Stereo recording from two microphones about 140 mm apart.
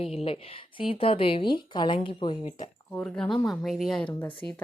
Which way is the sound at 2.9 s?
5° left (ahead or behind).